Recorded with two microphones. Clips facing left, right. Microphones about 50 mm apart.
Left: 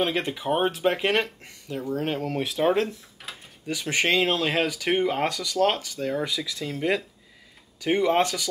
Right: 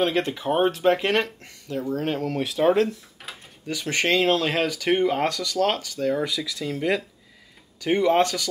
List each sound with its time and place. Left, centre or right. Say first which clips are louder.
0.0 s speech: right 3 dB; centre
3.3 s mechanisms: even; centre
3.6 s speech: right 1 dB; centre
6.2 s speech: right 2 dB; left
7.8 s speech: right 2 dB; centre